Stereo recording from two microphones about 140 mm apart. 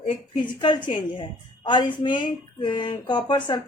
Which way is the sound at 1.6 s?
35° left (ahead or behind).